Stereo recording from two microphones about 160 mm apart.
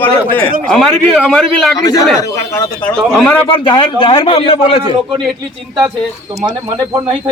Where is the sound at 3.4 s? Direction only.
30° left (ahead or behind).